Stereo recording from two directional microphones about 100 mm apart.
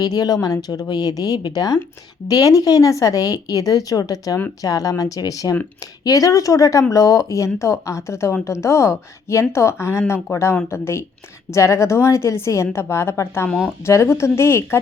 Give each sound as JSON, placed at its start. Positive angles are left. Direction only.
{"t": 0.0, "sound": "a woman's voice", "side_deg": 40}